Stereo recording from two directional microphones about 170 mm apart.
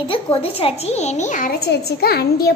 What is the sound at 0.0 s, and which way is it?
A woman's voice, 35° left (ahead or behind).